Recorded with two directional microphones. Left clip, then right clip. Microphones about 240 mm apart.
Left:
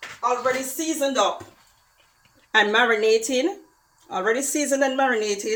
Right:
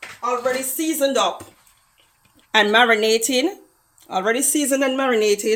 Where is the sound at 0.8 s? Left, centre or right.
Right.